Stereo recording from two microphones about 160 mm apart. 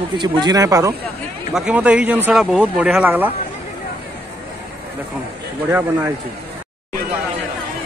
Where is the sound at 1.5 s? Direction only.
5° right (ahead or behind).